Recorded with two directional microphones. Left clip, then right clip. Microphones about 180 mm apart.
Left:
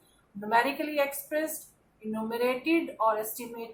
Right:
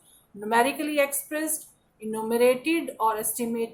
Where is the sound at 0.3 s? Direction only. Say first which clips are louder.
Right 3 dB; 40° right (ahead or behind).